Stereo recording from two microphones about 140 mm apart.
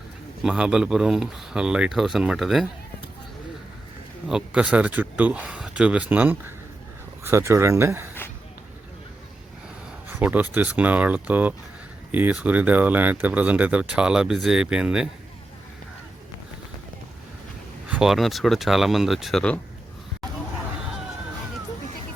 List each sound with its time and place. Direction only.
0.4 s speech: 5° right (ahead or behind)
4.3 s speech: 5° right (ahead or behind)
10.1 s speech: 10° right (ahead or behind)
17.8 s speech: 5° right (ahead or behind)